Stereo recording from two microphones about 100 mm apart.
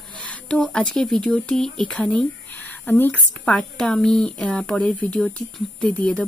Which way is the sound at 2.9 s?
20° left (ahead or behind).